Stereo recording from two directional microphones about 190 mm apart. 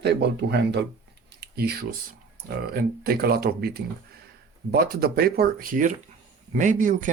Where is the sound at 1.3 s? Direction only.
55° right (ahead or behind).